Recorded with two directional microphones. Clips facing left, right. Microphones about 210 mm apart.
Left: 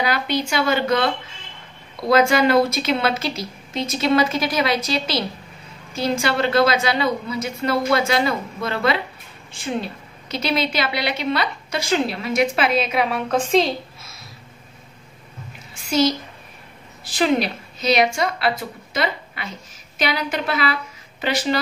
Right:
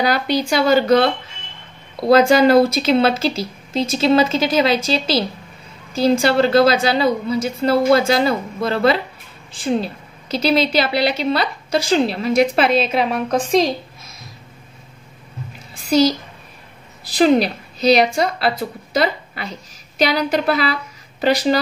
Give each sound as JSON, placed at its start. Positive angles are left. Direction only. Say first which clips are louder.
{"t": 0.0, "sound": "a woman's voice", "louder": "right 4 dB", "side_deg": -35}
{"t": 15.7, "sound": "a child's voice", "louder": "right 4 dB", "side_deg": -35}